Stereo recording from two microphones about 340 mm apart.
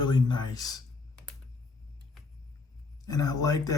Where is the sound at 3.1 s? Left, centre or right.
Centre.